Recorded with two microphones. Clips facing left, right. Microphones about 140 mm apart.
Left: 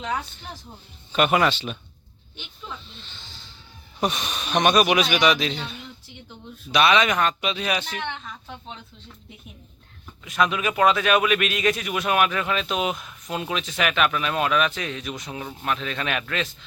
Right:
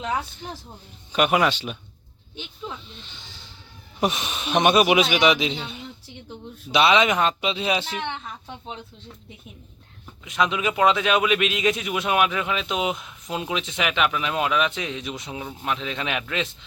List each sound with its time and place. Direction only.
1.1 s a man's voice: 10° right (ahead or behind)
4.1 s speech: centre (ahead or behind)
4.4 s speech: 25° right (ahead or behind)
10.2 s a man's voice: 20° right (ahead or behind)